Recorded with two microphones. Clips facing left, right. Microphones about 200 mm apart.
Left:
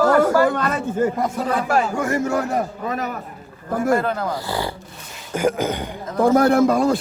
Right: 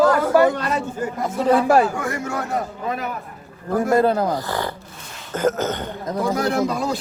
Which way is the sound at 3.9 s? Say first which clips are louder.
Right 5 dB; 35° right (ahead or behind).